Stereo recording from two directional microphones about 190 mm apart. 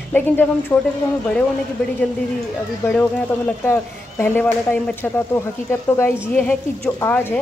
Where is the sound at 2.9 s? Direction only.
10° left (ahead or behind).